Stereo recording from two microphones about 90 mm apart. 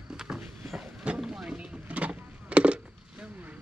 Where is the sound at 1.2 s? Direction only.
5° right (ahead or behind).